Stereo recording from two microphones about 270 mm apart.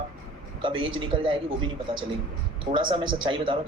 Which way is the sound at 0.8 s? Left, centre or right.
Right.